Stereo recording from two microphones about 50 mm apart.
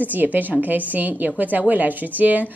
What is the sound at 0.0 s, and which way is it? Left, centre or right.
A woman's voice, right.